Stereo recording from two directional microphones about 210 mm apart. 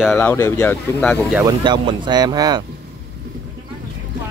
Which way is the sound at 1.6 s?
20° right (ahead or behind).